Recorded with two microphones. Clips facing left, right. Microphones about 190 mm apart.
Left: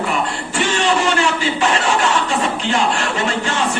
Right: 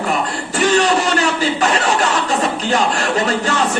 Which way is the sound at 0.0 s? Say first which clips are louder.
Right 1 dB; 40° right (ahead or behind).